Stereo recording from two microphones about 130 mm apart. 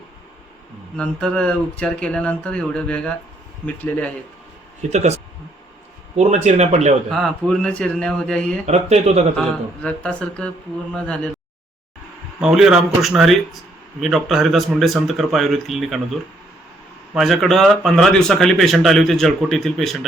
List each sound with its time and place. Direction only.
0.9 s speech: 5° left (ahead or behind)
4.9 s speech: 60° right (ahead or behind)
7.1 s speech: 5° left (ahead or behind)
8.6 s speech: 55° right (ahead or behind)
9.4 s speech: 10° left (ahead or behind)
12.4 s speech: 5° right (ahead or behind)
17.2 s speech: centre (ahead or behind)